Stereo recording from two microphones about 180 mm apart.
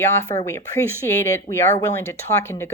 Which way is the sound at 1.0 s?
15° left (ahead or behind).